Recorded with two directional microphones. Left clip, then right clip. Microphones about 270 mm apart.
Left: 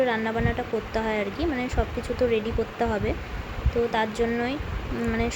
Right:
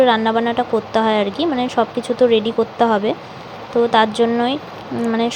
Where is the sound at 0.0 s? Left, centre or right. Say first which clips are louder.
Right 10 dB; centre.